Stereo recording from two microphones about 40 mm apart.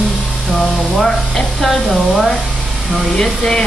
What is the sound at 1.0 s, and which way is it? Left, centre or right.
Speech, centre.